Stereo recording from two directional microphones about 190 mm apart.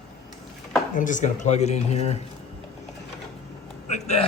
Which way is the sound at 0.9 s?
40° left (ahead or behind).